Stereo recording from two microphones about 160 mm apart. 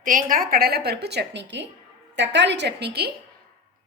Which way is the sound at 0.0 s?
55° right (ahead or behind).